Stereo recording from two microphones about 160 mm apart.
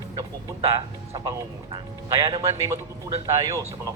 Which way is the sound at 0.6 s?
20° right (ahead or behind).